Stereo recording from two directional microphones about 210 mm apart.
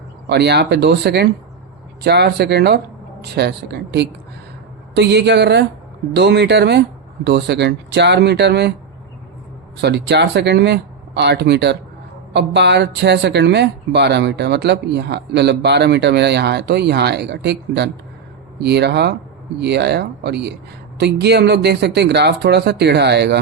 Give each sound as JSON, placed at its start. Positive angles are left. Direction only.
{"t": 0.3, "sound": "speech", "side_deg": -55}
{"t": 9.8, "sound": "speech", "side_deg": -55}